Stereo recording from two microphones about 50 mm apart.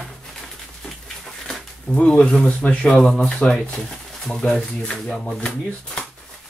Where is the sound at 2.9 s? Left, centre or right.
Centre.